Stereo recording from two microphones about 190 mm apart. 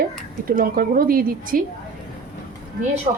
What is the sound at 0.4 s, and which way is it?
A woman's voice, 50° right (ahead or behind).